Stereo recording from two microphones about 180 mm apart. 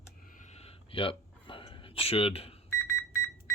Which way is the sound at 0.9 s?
30° left (ahead or behind).